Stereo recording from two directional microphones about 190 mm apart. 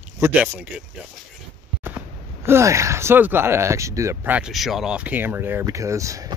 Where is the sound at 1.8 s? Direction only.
10° right (ahead or behind).